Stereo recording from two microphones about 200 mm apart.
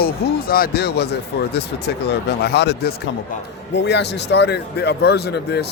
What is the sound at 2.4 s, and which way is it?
Speech, 55° left (ahead or behind).